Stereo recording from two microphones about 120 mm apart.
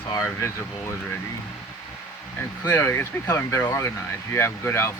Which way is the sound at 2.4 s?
20° left (ahead or behind).